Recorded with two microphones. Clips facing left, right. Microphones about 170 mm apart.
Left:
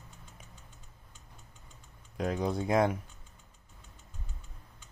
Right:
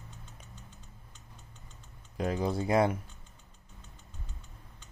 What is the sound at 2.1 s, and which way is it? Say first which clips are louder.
Speech: even; centre (ahead or behind).